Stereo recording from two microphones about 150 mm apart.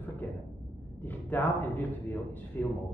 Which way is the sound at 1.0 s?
10° left (ahead or behind).